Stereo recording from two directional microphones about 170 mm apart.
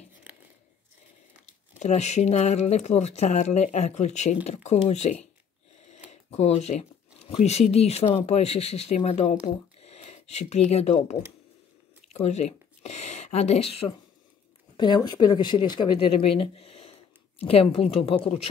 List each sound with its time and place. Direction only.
1.8 s speech: 40° left (ahead or behind)
12.1 s a sound: 40° left (ahead or behind)
14.8 s speech: 25° left (ahead or behind)